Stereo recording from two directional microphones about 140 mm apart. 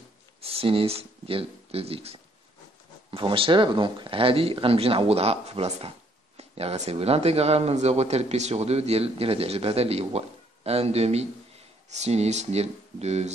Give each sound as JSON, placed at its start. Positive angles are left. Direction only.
{"t": 0.4, "sound": "speech", "side_deg": -45}